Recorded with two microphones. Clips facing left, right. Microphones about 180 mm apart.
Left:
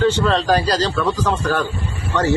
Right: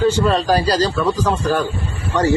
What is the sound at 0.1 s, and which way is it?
A man's voice, 10° right (ahead or behind).